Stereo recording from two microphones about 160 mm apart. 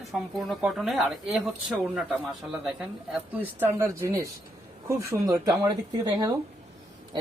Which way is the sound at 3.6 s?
15° right (ahead or behind).